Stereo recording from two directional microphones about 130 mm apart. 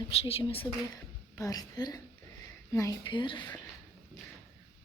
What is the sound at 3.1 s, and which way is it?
Speech, 40° left (ahead or behind).